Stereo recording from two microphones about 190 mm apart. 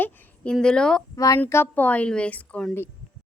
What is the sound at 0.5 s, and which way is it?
Speech, 5° left (ahead or behind).